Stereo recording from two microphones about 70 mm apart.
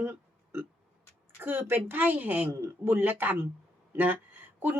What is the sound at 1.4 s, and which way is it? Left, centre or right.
Speech, right.